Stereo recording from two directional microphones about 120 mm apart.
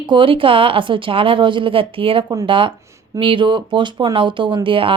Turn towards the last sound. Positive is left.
turn(degrees=-45)  # may be behind; listen again after turning